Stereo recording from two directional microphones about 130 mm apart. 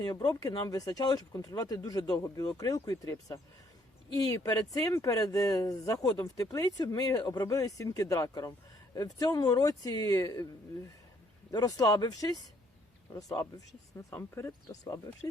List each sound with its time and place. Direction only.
0.0 s speech: 30° left (ahead or behind)
11.5 s speech: 30° left (ahead or behind)